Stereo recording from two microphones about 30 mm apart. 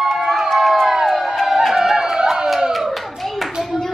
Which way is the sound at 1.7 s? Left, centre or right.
Centre.